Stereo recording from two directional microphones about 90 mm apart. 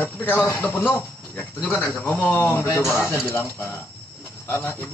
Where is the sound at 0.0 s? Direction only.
25° left (ahead or behind).